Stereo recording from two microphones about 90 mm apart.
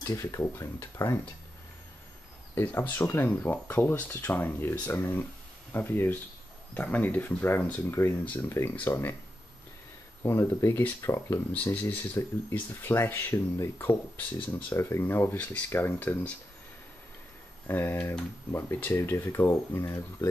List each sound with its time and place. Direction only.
0.0 s speech: 30° left (ahead or behind)
2.5 s speech: 20° left (ahead or behind)
8.5 s speech: 30° left (ahead or behind)
10.2 s speech: 30° left (ahead or behind)
11.5 s speech: 20° left (ahead or behind)
17.6 s speech: 20° left (ahead or behind)